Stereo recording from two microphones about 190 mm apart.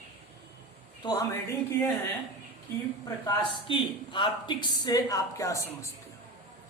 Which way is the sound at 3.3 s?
25° left (ahead or behind).